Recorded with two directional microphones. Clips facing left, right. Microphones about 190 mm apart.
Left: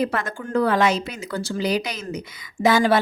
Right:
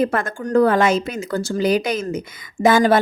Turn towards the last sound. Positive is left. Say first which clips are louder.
# right 3 dB
turn(degrees=-50)  # may be behind; listen again after turning